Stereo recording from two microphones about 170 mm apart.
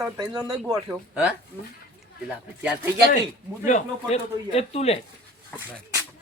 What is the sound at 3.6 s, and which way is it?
Speech, 45° left (ahead or behind).